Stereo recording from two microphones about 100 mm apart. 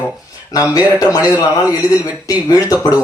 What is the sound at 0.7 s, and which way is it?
Speech, 40° left (ahead or behind).